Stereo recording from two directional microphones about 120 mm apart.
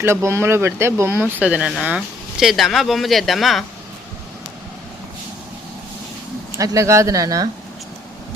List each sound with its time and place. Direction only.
0.0 s speech: 20° right (ahead or behind); by 3.6 s centre (ahead or behind)
6.6 s speech: 25° right (ahead or behind)